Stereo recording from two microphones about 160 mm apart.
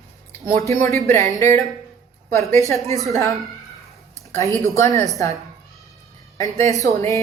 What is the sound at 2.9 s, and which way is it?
Speech, centre (ahead or behind).